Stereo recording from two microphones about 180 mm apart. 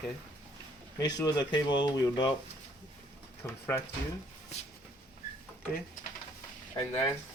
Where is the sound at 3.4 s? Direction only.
15° left (ahead or behind).